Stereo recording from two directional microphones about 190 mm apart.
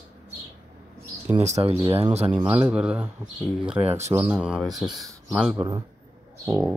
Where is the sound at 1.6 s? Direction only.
30° right (ahead or behind).